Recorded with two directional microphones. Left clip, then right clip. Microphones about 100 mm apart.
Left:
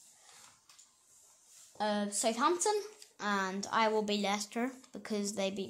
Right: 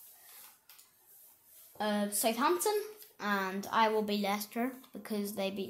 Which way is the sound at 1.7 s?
55° left (ahead or behind).